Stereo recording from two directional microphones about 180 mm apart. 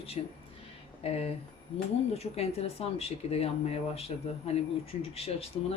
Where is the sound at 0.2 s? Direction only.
35° left (ahead or behind).